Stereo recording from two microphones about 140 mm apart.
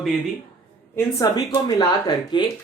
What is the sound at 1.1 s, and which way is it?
Speech, 25° left (ahead or behind).